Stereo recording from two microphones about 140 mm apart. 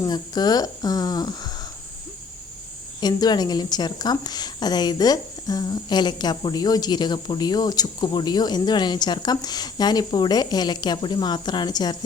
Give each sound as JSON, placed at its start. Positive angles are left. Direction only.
{"t": 0.0, "sound": "a woman's voice", "side_deg": 30}
{"t": 3.0, "sound": "a woman's voice", "side_deg": 30}